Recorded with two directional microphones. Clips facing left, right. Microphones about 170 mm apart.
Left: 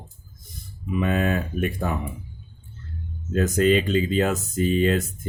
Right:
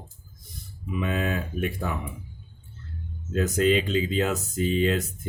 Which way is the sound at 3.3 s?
50° left (ahead or behind).